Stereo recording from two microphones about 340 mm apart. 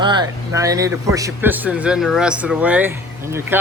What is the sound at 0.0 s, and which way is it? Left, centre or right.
A man's voice, centre.